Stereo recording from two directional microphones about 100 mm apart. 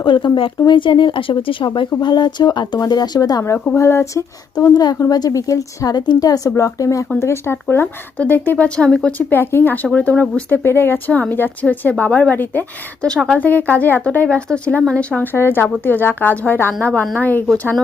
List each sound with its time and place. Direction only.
0.0 s a woman's voice: 55° left (ahead or behind); by 4.2 s 30° left (ahead or behind)
4.8 s a woman's voice: 40° left (ahead or behind); by 17.4 s 15° left (ahead or behind)